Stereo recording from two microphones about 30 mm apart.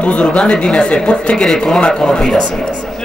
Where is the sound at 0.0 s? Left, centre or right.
Left.